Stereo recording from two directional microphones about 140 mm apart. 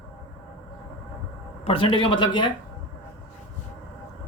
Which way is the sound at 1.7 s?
40° left (ahead or behind).